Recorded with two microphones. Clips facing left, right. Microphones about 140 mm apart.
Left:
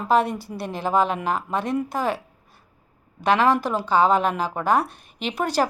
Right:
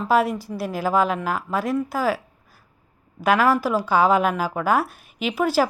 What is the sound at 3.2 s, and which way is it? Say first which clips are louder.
A woman's voice: right 1 dB; 5° right (ahead or behind).